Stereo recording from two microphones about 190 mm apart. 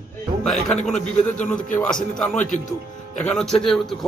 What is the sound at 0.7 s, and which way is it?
A man's voice, 5° left (ahead or behind).